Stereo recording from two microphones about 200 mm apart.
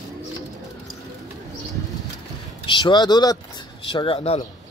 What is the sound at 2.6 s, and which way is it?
Speech, 25° left (ahead or behind).